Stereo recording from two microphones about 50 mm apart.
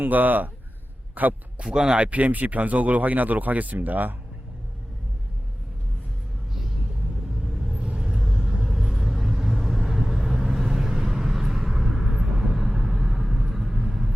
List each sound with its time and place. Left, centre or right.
0.0 s speech: right
1.1 s a sound: right
1.6 s speech: centre
2.0 s speech: right
7.4 s vehicle: centre